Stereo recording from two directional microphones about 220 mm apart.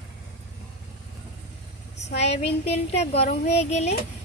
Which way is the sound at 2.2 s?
30° left (ahead or behind).